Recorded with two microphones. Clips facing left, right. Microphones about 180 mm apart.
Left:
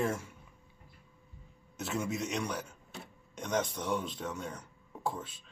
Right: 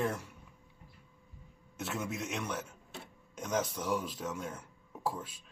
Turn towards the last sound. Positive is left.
turn(degrees=-5)  # may be behind; listen again after turning